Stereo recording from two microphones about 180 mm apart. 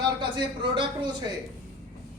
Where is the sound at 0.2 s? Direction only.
25° right (ahead or behind).